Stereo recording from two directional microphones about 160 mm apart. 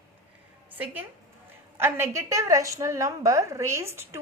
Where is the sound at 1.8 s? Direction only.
15° right (ahead or behind).